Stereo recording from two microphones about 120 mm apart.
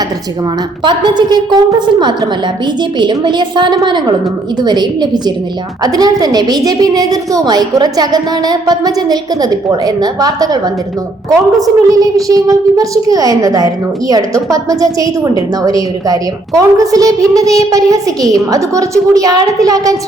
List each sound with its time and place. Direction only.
0.9 s a woman's voice: 35° right (ahead or behind)